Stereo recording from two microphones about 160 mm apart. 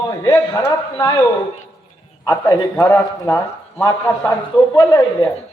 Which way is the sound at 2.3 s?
20° left (ahead or behind).